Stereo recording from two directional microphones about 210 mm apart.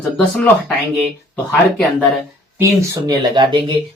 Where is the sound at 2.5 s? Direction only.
15° right (ahead or behind).